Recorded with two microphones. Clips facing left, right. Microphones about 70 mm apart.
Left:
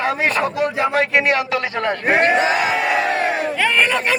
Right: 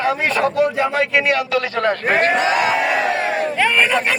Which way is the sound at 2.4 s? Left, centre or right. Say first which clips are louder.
Right 1 dB; left.